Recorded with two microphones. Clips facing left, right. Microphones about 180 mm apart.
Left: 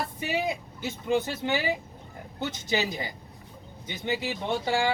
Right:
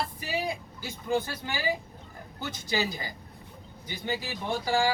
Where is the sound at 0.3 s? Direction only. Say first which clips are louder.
Left 5 dB; 20° left (ahead or behind).